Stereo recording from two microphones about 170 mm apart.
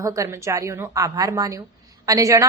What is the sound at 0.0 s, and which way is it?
A woman's voice, 20° right (ahead or behind).